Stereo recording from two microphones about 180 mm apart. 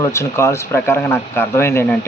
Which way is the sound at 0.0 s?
15° left (ahead or behind).